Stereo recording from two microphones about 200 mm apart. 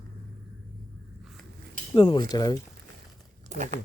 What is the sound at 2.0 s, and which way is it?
Speech, 25° left (ahead or behind).